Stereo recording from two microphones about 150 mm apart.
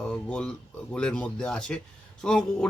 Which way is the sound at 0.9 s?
5° left (ahead or behind).